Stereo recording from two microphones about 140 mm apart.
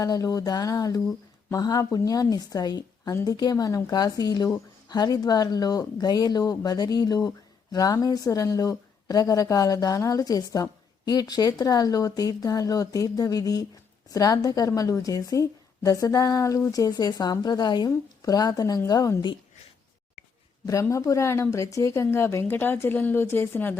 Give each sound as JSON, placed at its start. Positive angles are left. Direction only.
{"t": 0.0, "sound": "a woman's voice", "side_deg": 25}
{"t": 20.7, "sound": "speech", "side_deg": 25}